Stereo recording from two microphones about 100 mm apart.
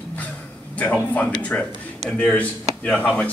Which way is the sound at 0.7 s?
15° left (ahead or behind).